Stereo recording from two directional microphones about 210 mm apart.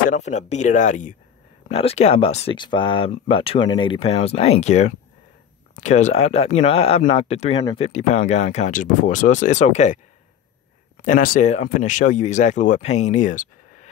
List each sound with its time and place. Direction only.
0.1 s speech: 35° left (ahead or behind)
11.1 s speech: 40° left (ahead or behind)